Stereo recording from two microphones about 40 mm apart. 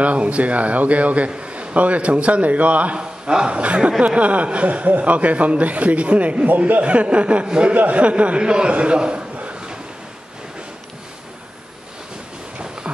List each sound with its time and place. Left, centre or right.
0.0 s a man's voice: right
3.0 s a man's voice: right
7.7 s a man's voice: right